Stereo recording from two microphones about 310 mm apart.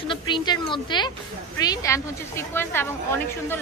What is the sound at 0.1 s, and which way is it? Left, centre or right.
A woman's voice, centre.